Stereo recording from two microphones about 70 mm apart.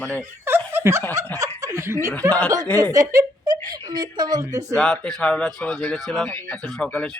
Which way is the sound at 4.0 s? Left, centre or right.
Right.